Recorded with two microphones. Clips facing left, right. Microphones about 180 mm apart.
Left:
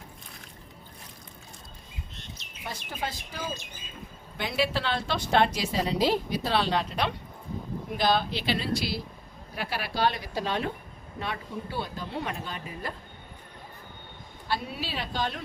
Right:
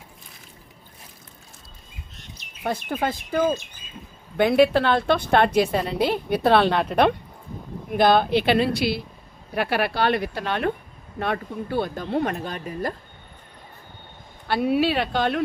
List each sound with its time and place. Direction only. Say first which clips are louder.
2.6 s a woman's voice: right 10 dB; 55° right (ahead or behind)
14.4 s a woman's voice: right 12 dB; 65° right (ahead or behind)